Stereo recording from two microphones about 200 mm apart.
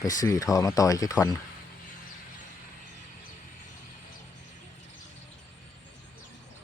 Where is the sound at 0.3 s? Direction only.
15° left (ahead or behind).